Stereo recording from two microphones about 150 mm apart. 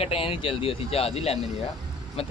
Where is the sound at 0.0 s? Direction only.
40° left (ahead or behind).